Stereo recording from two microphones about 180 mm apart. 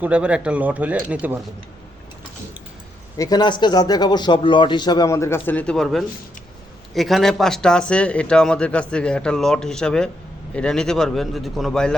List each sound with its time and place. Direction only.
0.0 s speech: 5° right (ahead or behind)
3.2 s a man's voice: 20° left (ahead or behind); by 11.9 s 5° left (ahead or behind)